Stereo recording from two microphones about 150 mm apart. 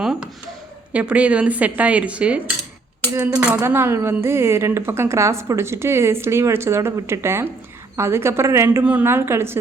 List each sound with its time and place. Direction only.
0.0 s a sound: 5° right (ahead or behind)
0.9 s a woman's voice: 10° right (ahead or behind)
3.4 s a woman's voice: 15° right (ahead or behind)